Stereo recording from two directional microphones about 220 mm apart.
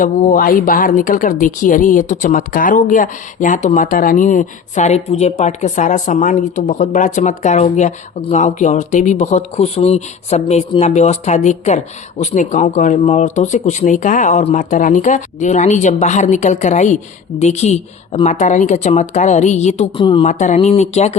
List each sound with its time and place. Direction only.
0.0 s speech: 35° left (ahead or behind)
20.2 s speech: 35° left (ahead or behind)